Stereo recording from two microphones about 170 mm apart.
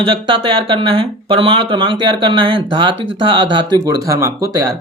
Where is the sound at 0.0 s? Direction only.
30° right (ahead or behind).